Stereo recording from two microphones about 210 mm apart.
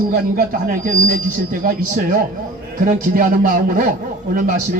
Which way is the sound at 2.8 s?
40° right (ahead or behind).